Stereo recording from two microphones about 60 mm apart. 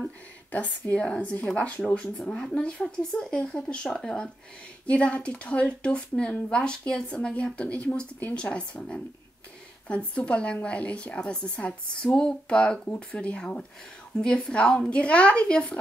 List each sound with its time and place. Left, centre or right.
0.5 s a woman's voice: left